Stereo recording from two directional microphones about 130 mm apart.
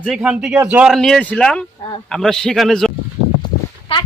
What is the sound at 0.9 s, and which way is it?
A man's voice, centre (ahead or behind).